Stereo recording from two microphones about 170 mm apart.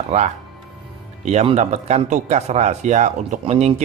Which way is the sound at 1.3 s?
40° right (ahead or behind).